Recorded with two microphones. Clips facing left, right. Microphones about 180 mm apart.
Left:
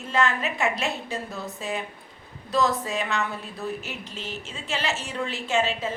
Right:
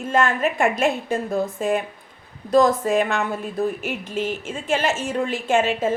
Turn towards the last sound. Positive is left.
turn(degrees=-50)  # may be behind; listen again after turning